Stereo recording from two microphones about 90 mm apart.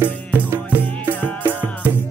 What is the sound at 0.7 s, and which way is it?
Music, 20° right (ahead or behind).